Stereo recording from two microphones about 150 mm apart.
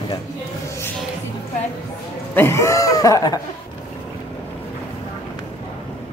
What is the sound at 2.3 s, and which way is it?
Speech, 15° left (ahead or behind).